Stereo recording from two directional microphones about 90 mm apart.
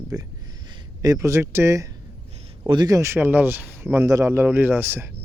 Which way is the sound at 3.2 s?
20° right (ahead or behind).